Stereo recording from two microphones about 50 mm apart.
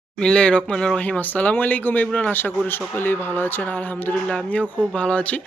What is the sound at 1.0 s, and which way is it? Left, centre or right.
A woman's voice, left.